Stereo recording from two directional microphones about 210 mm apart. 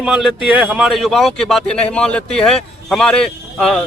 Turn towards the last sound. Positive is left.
turn(degrees=5)  # may be behind; listen again after turning